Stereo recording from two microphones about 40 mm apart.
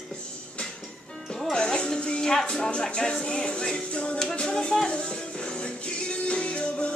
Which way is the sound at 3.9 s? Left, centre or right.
Left.